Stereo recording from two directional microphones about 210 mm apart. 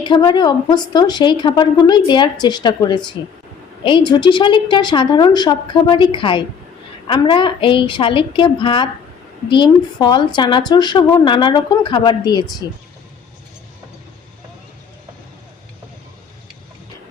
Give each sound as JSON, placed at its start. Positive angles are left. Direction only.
{"t": 0.0, "sound": "a woman's voice", "side_deg": 20}